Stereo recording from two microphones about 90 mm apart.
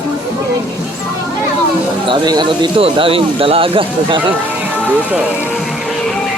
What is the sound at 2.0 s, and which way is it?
Speech, 60° right (ahead or behind).